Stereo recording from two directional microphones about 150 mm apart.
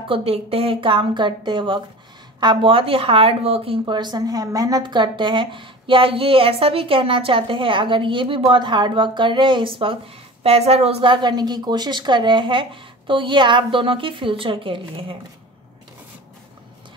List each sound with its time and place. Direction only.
0.1 s a woman's voice: 40° right (ahead or behind)